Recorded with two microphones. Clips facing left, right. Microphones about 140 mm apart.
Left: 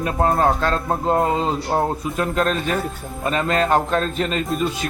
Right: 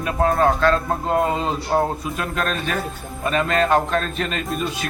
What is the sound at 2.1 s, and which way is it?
Speech, 25° left (ahead or behind).